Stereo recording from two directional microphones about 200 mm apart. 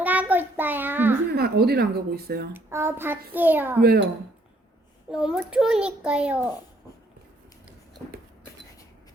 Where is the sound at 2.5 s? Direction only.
10° right (ahead or behind).